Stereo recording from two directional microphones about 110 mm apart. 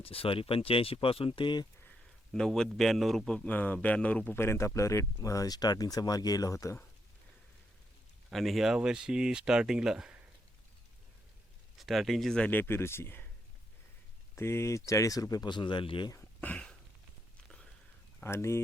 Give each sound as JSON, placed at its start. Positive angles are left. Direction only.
{"t": 0.0, "sound": "speech", "side_deg": 60}
{"t": 2.3, "sound": "a man's voice", "side_deg": 5}
{"t": 4.4, "sound": "speech", "side_deg": 25}
{"t": 8.3, "sound": "speech", "side_deg": 0}
{"t": 11.8, "sound": "a man's voice", "side_deg": 0}
{"t": 14.3, "sound": "speech", "side_deg": 25}
{"t": 16.1, "sound": "a sound", "side_deg": 15}
{"t": 18.2, "sound": "speech", "side_deg": 25}